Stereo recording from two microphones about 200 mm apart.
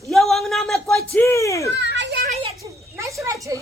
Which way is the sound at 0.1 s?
Centre (ahead or behind).